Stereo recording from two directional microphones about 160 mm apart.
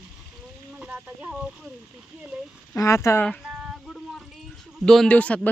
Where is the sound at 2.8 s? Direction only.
20° left (ahead or behind).